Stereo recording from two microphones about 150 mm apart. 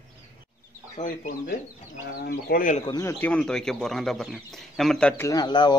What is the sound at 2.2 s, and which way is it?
Speech, 90° left.